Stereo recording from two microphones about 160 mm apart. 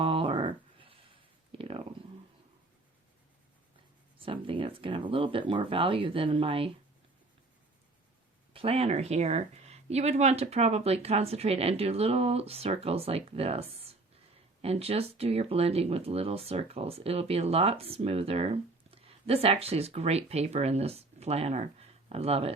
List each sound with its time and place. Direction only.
0.0 s a sound: 30° right (ahead or behind)
4.2 s speech: 35° right (ahead or behind)
8.5 s speech: 40° right (ahead or behind)